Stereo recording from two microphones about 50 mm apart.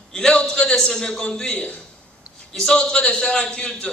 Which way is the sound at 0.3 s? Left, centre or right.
Left.